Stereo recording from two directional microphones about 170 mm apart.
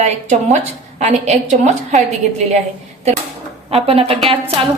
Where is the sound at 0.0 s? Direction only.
40° right (ahead or behind).